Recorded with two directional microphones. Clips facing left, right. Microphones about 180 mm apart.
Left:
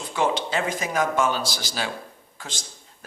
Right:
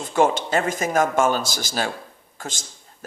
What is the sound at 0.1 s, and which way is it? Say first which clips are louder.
Speech: right 5 dB; 45° right (ahead or behind).